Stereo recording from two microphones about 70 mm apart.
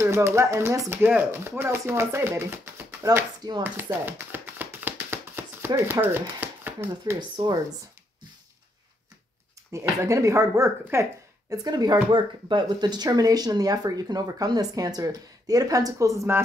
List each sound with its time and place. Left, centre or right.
0.0 s speech: right
3.6 s a sound: right
5.9 s speech: right
7.2 s speech: right
9.7 s speech: right
11.5 s speech: right